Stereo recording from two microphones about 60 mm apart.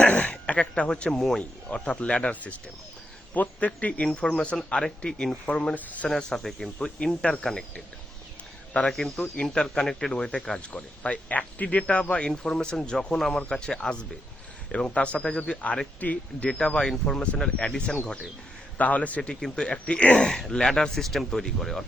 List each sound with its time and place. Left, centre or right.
0.0 s a sound: left
1.4 s speech: centre
4.4 s speech: centre
6.1 s speech: centre
6.7 s speech: centre
8.9 s speech: centre
12.3 s speech: centre; by 19.3 s left
19.3 s speech: centre